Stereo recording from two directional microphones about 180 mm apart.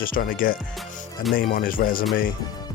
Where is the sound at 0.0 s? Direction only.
50° left (ahead or behind).